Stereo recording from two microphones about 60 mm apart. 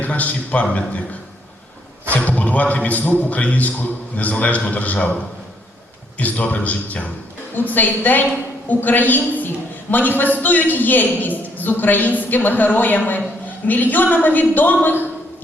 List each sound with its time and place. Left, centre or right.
0.0 s a man's voice: left
2.1 s a man's voice: left